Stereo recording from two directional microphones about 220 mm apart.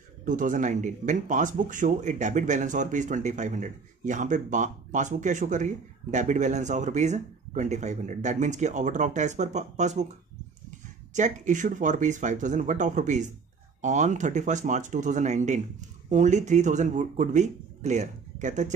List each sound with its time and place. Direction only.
0.2 s speech: 35° right (ahead or behind)
11.1 s speech: 35° right (ahead or behind)